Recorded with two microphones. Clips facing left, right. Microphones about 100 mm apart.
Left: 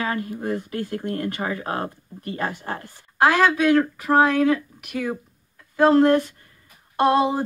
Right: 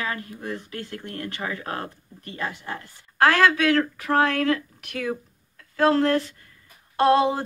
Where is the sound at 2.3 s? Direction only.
40° left (ahead or behind).